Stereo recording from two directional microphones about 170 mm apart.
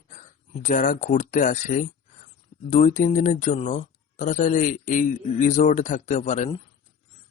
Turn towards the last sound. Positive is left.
turn(degrees=40)  # may be behind; listen again after turning